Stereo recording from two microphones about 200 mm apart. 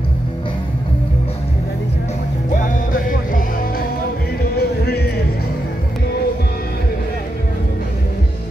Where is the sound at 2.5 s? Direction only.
40° left (ahead or behind).